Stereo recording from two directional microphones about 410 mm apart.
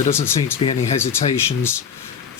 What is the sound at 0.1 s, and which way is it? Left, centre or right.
Speech, centre.